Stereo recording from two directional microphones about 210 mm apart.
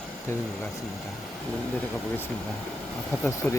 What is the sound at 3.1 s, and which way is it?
Speech, 10° left (ahead or behind).